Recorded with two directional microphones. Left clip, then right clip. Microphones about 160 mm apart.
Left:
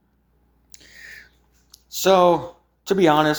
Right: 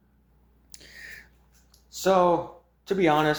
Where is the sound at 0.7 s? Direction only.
Centre (ahead or behind).